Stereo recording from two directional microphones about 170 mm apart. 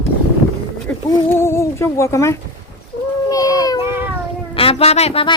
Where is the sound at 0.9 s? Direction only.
10° left (ahead or behind).